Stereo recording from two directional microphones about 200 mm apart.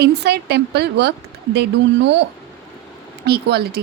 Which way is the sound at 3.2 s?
50° right (ahead or behind).